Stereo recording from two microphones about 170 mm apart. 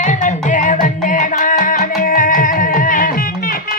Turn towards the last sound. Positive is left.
turn(degrees=55)  # may be behind; listen again after turning